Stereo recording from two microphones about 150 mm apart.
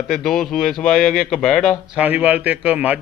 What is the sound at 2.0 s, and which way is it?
Speech, 10° right (ahead or behind).